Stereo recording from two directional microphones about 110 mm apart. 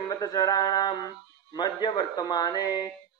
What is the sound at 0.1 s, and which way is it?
Speech, 35° left (ahead or behind).